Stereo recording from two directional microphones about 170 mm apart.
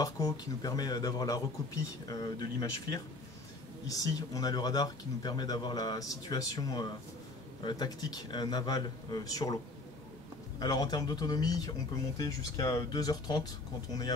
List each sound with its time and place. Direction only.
0.0 s speech: 20° left (ahead or behind)
10.6 s speech: 25° left (ahead or behind)